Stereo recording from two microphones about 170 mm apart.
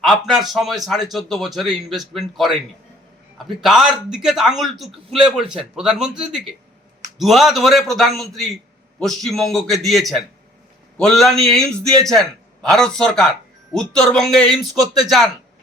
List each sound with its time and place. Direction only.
0.0 s a man's voice: centre (ahead or behind)